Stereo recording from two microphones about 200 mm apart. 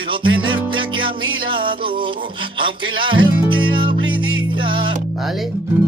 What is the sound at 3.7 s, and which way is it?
Music, 25° right (ahead or behind).